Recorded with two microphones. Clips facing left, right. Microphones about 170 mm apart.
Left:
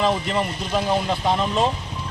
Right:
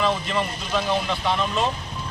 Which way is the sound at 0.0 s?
35° left (ahead or behind).